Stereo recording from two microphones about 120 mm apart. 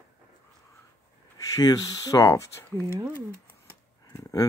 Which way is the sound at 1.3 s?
30° left (ahead or behind).